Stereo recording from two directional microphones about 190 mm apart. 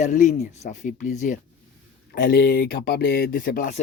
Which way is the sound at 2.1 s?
55° left (ahead or behind).